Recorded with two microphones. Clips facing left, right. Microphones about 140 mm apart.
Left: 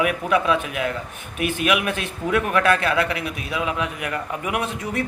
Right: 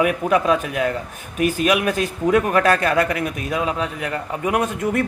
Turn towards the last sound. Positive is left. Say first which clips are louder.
# right 5 dB
turn(degrees=-45)  # may be behind; listen again after turning